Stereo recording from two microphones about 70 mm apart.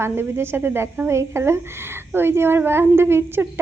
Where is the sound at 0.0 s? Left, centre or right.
Right.